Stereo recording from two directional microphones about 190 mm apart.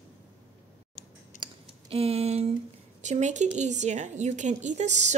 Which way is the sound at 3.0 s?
40° right (ahead or behind).